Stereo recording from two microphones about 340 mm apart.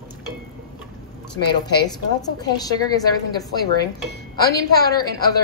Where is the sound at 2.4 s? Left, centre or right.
Centre.